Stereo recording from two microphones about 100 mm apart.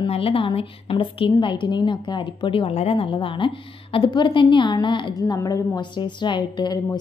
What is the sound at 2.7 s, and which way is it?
A woman's voice, 80° left.